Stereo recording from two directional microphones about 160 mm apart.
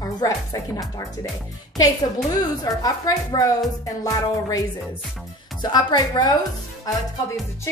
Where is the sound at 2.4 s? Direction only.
20° left (ahead or behind).